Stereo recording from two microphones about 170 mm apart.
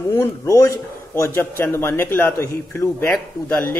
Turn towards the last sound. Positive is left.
turn(degrees=10)  # may be behind; listen again after turning